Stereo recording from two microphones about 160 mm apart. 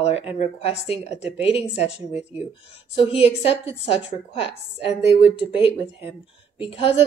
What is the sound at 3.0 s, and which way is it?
Speech, 40° left (ahead or behind).